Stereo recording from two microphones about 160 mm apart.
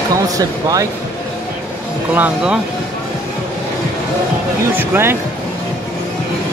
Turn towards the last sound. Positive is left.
turn(degrees=-15)  # may be behind; listen again after turning